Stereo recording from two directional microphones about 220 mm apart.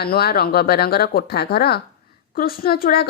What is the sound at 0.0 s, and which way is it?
A woman's voice, 45° left (ahead or behind).